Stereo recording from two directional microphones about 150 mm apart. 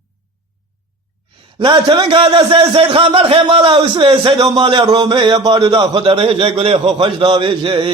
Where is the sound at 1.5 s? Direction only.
35° right (ahead or behind).